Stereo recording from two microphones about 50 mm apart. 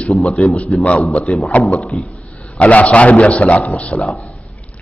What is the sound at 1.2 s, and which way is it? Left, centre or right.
Speech, centre.